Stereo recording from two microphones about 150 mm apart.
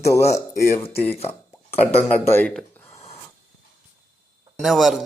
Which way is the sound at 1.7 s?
15° left (ahead or behind).